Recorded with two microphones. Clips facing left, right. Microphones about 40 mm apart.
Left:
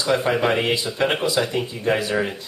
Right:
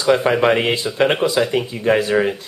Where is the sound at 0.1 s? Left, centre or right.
Right.